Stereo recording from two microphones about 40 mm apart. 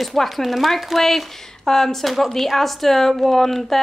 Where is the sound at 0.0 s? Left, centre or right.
Centre.